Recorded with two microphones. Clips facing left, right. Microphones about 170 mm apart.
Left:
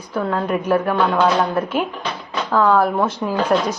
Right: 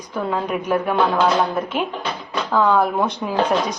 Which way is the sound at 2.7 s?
5° left (ahead or behind).